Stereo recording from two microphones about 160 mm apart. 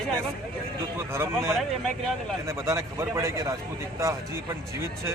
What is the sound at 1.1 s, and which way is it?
A man's voice, 15° right (ahead or behind).